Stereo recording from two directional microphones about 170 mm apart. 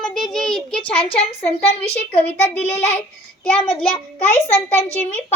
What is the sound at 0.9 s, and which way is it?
A woman's voice, 35° left (ahead or behind).